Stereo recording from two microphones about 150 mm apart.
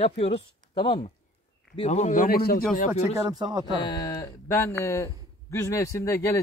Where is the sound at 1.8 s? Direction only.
50° left (ahead or behind); by 2.6 s 90° left.